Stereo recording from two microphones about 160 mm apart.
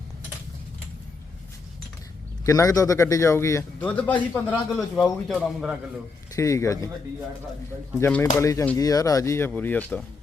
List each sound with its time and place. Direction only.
2.4 s a man's voice: 20° left (ahead or behind); by 5.7 s centre (ahead or behind)
6.3 s a man's voice: 20° left (ahead or behind)
7.9 s a man's voice: 15° left (ahead or behind)